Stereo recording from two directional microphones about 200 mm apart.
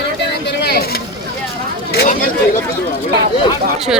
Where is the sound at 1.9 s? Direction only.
50° left (ahead or behind).